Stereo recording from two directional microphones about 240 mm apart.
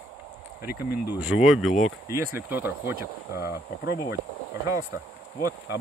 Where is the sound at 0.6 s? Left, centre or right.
Left.